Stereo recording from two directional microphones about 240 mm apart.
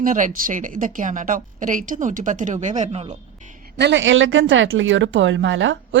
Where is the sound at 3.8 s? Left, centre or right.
Right.